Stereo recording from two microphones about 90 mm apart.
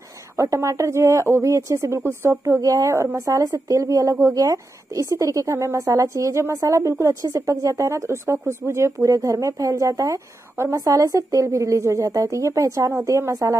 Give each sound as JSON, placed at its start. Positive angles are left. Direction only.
{"t": 0.4, "sound": "a woman's voice", "side_deg": -35}